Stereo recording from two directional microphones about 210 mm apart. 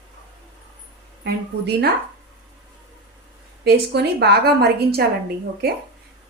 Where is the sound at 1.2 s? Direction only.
50° right (ahead or behind).